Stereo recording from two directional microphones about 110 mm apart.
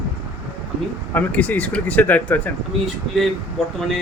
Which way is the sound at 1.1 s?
15° left (ahead or behind).